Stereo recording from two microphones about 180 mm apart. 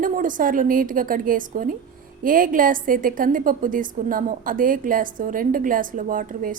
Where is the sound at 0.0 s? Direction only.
50° right (ahead or behind).